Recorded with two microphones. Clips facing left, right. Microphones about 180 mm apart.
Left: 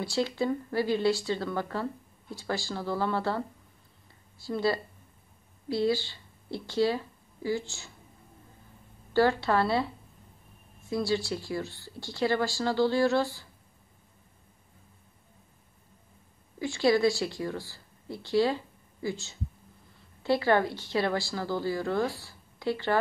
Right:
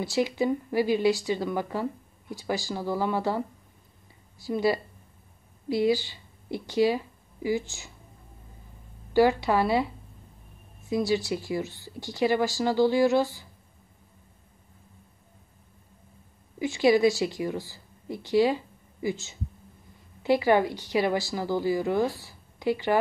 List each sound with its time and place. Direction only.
0.0 s a woman's voice: 15° right (ahead or behind)
4.5 s a woman's voice: 15° right (ahead or behind)
9.1 s a woman's voice: 15° right (ahead or behind)
10.9 s a woman's voice: 15° right (ahead or behind)
16.5 s a woman's voice: 15° right (ahead or behind)
22.2 s a sound: 15° right (ahead or behind)